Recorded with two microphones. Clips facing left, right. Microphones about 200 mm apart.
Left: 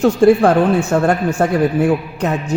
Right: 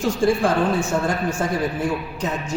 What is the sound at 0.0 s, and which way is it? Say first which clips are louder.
Speech: left 8 dB; 60° left (ahead or behind).